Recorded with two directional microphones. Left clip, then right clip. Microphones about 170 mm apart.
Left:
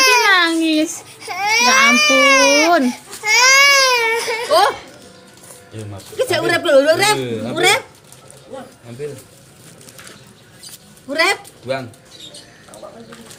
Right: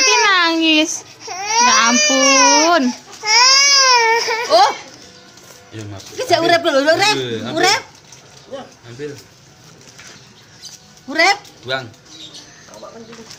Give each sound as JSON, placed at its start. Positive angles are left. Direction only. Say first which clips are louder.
{"t": 0.1, "sound": "a sound", "louder": "even", "side_deg": 5}
{"t": 1.3, "sound": "baby cry", "louder": "left 1 dB", "side_deg": -15}
{"t": 1.6, "sound": "baby cry", "louder": "even", "side_deg": 5}
{"t": 1.9, "sound": "speech", "louder": "left 2 dB", "side_deg": -15}
{"t": 2.8, "sound": "baby cry", "louder": "left 1 dB", "side_deg": -20}
{"t": 6.1, "sound": "speech", "louder": "right 3 dB", "side_deg": -35}
{"t": 11.1, "sound": "speech", "louder": "right 2 dB", "side_deg": -35}